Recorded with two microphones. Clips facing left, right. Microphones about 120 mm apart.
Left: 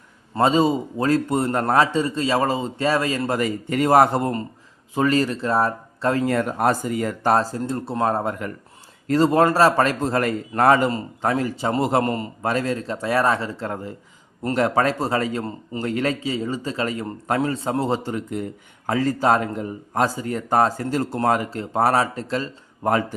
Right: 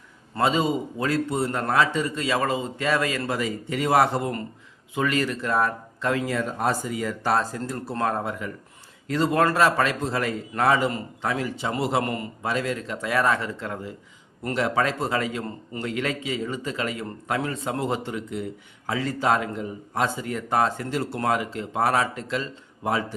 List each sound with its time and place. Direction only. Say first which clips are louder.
0.3 s a man's voice: left 5 dB; 35° left (ahead or behind)
1.3 s a man's voice: left 4 dB; 50° left (ahead or behind); by 3.3 s 30° left (ahead or behind)
3.3 s a man's voice: left 5 dB; 50° left (ahead or behind)
6.2 s speech: left 5 dB; 60° left (ahead or behind)
7.7 s speech: left 4 dB; 25° left (ahead or behind)
8.2 s speech: left 4 dB; 50° left (ahead or behind)
9.0 s a man's voice: left 5 dB; 40° left (ahead or behind)
12.0 s a man's voice: left 5 dB; 30° left (ahead or behind)
12.4 s a man's voice: left 3 dB; 45° left (ahead or behind)